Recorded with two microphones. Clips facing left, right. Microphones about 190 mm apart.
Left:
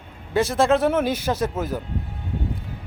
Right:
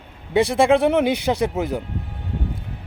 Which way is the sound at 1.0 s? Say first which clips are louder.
Right 4 dB; 70° right (ahead or behind).